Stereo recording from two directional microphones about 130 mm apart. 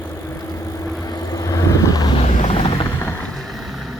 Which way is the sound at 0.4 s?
25° left (ahead or behind).